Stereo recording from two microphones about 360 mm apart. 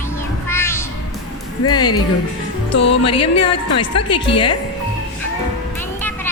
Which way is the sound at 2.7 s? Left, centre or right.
Left.